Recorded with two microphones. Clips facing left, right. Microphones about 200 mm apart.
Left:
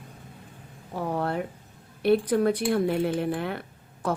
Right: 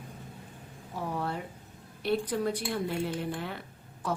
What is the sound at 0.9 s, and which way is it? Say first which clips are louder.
A woman's voice: left 6 dB; 55° left (ahead or behind).